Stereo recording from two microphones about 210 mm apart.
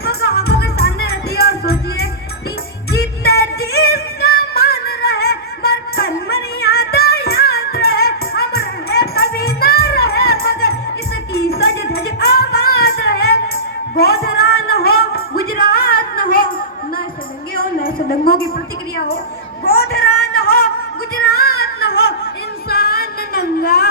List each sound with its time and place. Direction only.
0.0 s music: 50° left (ahead or behind)
17.5 s a sound: 45° left (ahead or behind)
21.2 s music: 45° left (ahead or behind)
22.7 s music: 50° left (ahead or behind)